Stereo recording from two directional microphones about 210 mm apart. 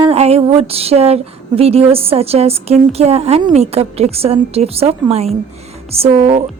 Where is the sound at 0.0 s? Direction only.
30° right (ahead or behind).